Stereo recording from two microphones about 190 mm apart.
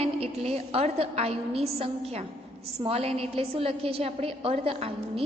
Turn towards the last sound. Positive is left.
turn(degrees=-30)  # may be behind; listen again after turning